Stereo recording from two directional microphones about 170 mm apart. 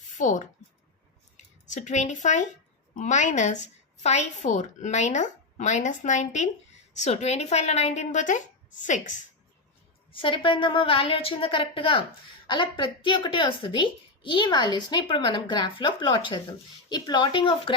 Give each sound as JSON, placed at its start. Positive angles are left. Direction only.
{"t": 0.1, "sound": "a woman's voice", "side_deg": 45}
{"t": 10.1, "sound": "a woman's voice", "side_deg": 30}